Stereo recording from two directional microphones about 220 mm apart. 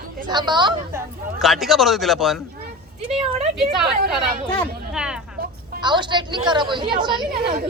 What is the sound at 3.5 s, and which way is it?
Speech, centre (ahead or behind).